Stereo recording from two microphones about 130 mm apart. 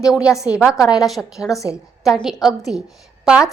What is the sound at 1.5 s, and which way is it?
Speech, 25° left (ahead or behind).